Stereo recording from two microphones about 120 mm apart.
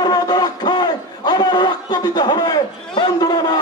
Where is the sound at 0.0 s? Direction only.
35° left (ahead or behind).